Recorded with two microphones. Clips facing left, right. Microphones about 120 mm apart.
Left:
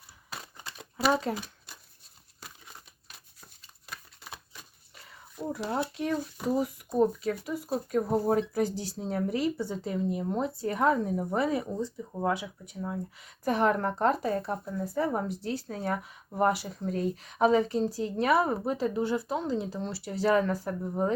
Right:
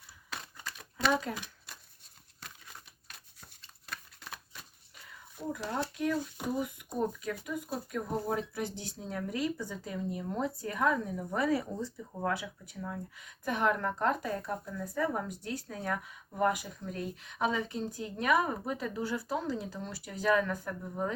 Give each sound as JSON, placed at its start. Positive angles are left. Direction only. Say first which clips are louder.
{"t": 0.5, "sound": "a sound", "louder": "left 1 dB", "side_deg": 20}
{"t": 1.2, "sound": "speech", "louder": "left 6 dB", "side_deg": 30}
{"t": 5.5, "sound": "speech", "louder": "left 3 dB", "side_deg": 30}